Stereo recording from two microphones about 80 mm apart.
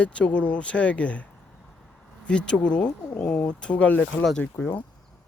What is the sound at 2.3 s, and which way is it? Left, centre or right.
Speech, centre.